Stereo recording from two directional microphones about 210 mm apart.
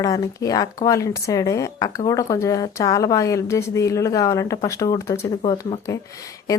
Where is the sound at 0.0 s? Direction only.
15° left (ahead or behind).